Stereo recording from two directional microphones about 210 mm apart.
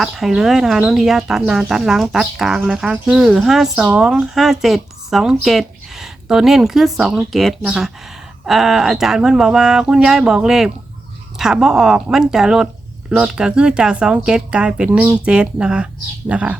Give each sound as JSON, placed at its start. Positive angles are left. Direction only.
{"t": 0.0, "sound": "speech", "side_deg": 0}